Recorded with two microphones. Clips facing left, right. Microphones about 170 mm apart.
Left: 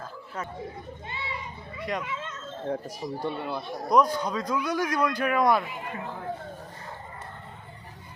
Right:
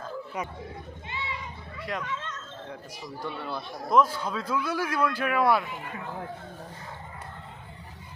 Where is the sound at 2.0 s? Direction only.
10° left (ahead or behind).